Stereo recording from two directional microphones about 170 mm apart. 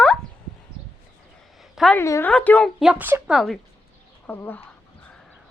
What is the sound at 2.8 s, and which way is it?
Speech, 10° right (ahead or behind).